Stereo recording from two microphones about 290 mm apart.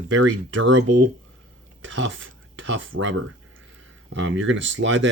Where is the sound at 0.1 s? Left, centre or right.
Right.